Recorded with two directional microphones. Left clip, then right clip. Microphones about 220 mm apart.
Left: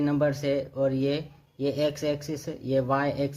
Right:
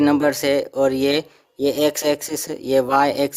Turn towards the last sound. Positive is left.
turn(degrees=-45)  # may be behind; listen again after turning